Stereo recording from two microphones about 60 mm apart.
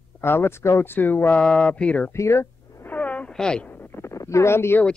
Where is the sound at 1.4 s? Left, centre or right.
Centre.